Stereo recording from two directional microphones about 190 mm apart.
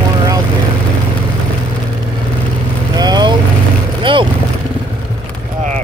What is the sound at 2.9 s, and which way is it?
Vehicle, 20° right (ahead or behind).